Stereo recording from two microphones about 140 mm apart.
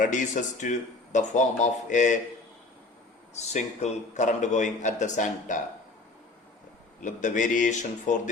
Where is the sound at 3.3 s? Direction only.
55° left (ahead or behind).